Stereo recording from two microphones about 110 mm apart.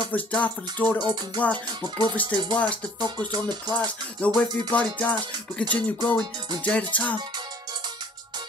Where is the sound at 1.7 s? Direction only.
40° right (ahead or behind).